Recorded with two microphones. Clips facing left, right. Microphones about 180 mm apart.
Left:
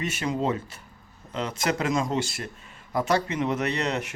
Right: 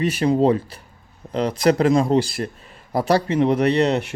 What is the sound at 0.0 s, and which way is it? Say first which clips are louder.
Speech: right 10 dB; 35° right (ahead or behind).